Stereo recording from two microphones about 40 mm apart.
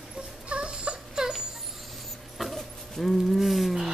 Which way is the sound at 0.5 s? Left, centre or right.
Right.